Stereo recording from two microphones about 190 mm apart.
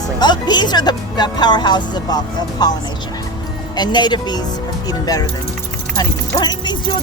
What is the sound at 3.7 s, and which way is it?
Speech, 25° left (ahead or behind).